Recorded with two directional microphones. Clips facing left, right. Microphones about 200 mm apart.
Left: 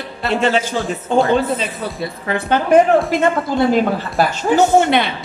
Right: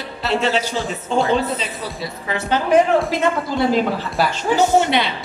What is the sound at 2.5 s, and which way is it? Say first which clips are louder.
A woman's voice: left 3 dB; 55° left (ahead or behind).